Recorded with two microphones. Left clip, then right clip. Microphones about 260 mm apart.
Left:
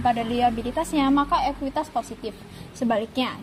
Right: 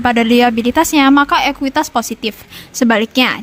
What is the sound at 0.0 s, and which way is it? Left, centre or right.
A woman's voice, right.